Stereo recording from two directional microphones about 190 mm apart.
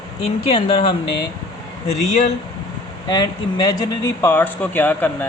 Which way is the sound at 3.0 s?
20° left (ahead or behind).